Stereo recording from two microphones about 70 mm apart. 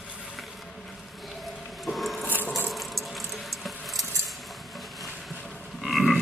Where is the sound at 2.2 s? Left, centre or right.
Left.